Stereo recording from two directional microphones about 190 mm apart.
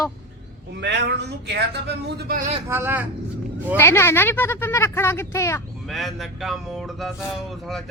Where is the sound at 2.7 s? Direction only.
10° right (ahead or behind).